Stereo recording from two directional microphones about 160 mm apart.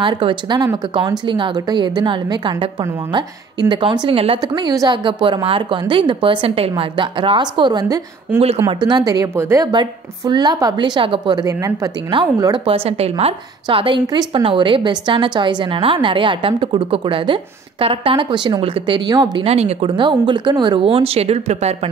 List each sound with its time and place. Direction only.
0.0 s a woman's voice: 30° right (ahead or behind)